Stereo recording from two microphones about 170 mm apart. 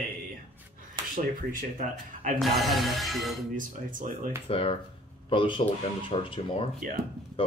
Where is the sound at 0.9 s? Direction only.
55° right (ahead or behind).